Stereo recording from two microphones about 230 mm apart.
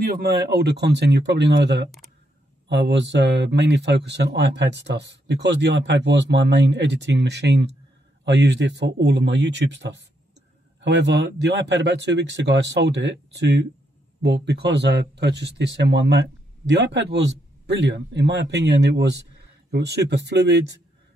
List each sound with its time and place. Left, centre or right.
0.0 s speech: right